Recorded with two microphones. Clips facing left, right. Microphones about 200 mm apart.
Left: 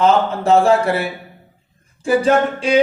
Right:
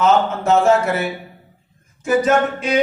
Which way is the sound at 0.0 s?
30° left (ahead or behind).